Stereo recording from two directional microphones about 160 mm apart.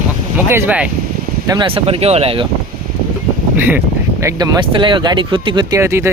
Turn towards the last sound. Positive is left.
turn(degrees=-15)  # may be behind; listen again after turning